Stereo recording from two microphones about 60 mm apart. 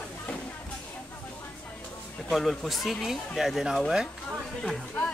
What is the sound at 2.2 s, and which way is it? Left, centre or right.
Speech, centre.